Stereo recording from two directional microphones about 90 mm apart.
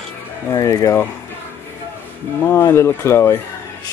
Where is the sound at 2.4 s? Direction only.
30° left (ahead or behind).